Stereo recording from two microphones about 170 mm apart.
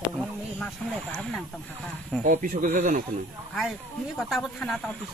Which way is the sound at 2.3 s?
50° right (ahead or behind).